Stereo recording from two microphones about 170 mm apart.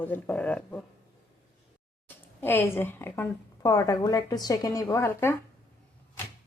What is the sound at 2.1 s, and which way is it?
A woman's voice, 10° left (ahead or behind).